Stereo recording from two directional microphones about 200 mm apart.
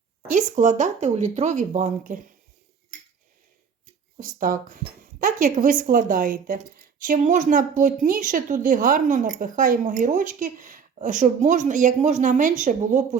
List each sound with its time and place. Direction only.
0.3 s a woman's voice: 40° right (ahead or behind)
4.2 s a woman's voice: 40° right (ahead or behind)